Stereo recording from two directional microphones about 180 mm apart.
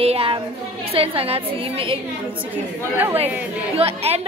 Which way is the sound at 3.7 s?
35° right (ahead or behind).